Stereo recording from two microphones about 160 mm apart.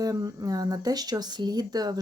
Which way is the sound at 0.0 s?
25° right (ahead or behind).